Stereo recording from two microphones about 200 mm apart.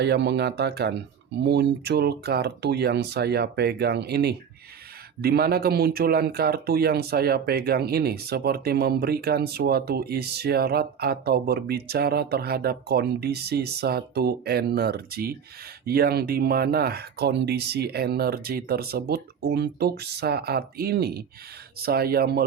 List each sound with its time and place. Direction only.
0.0 s speech: 55° right (ahead or behind)